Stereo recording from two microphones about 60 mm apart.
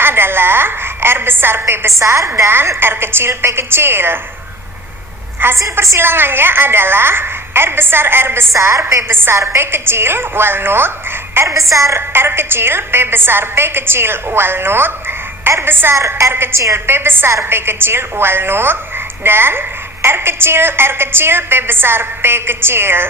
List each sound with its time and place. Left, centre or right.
0.0 s a sound: right
2.0 s a woman's voice: right
5.4 s a woman's voice: right
8.5 s a woman's voice: right
9.0 s a woman's voice: right
11.7 s a woman's voice: right
11.9 s a woman's voice: right
16.0 s a woman's voice: right